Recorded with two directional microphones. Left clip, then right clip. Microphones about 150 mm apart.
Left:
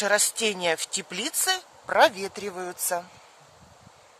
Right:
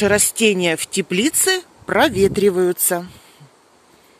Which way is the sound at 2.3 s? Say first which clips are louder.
Right 17 dB; 30° right (ahead or behind).